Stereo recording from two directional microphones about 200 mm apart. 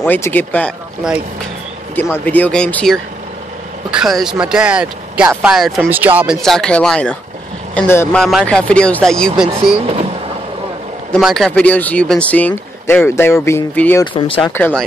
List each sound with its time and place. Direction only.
0.0 s speech: 10° left (ahead or behind); by 6.3 s 10° right (ahead or behind)
6.4 s speech: 5° left (ahead or behind)
11.1 s speech: centre (ahead or behind)
14.1 s speech: 25° left (ahead or behind)
14.4 s speech: 10° left (ahead or behind)